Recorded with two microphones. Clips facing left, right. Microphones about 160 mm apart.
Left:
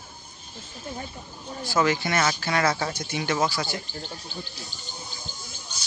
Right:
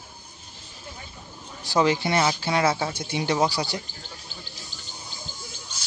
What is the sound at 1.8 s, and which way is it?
Speech, 25° right (ahead or behind).